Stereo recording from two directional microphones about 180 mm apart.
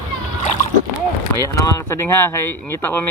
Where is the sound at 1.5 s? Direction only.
15° left (ahead or behind).